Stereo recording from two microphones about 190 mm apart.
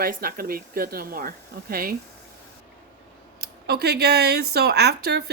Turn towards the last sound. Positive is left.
turn(degrees=-60)  # may be behind; listen again after turning